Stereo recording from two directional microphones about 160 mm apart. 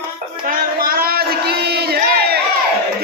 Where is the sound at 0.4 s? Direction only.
60° right (ahead or behind).